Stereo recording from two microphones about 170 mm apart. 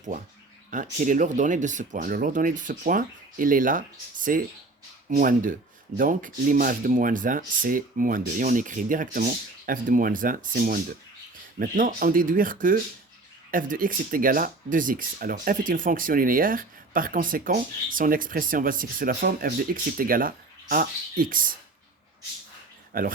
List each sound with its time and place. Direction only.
0.7 s speech: 50° right (ahead or behind)
22.9 s speech: 55° right (ahead or behind)